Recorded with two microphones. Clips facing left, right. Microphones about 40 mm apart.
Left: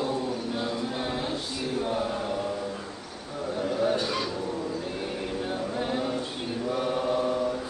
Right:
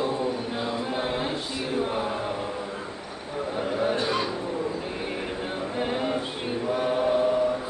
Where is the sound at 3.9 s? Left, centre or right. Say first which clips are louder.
Right 2 dB; right.